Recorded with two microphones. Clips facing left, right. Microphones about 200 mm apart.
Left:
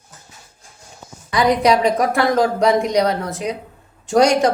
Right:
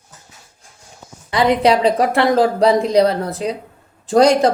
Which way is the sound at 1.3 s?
25° right (ahead or behind).